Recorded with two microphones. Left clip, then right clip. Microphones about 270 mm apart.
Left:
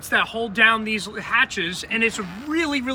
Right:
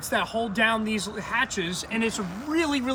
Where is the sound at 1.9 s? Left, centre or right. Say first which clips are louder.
Left 6 dB; centre.